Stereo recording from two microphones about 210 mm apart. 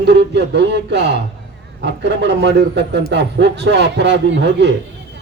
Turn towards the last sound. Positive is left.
turn(degrees=-55)  # may be behind; listen again after turning